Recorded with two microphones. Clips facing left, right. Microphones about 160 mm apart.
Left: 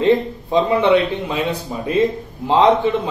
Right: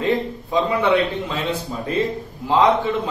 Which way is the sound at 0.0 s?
25° left (ahead or behind).